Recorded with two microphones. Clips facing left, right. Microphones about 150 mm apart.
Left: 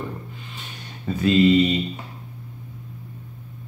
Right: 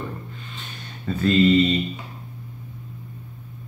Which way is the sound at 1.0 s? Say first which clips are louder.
Left 1 dB; 15° left (ahead or behind).